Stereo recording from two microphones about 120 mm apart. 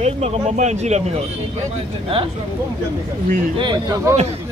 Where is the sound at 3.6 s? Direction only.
40° right (ahead or behind).